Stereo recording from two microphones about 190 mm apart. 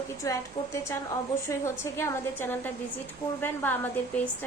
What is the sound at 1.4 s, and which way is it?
A woman's voice, 15° left (ahead or behind).